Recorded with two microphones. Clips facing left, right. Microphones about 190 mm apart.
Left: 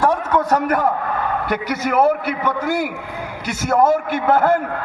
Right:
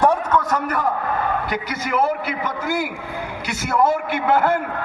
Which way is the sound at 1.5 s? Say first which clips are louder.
Left 4 dB; 55° left (ahead or behind).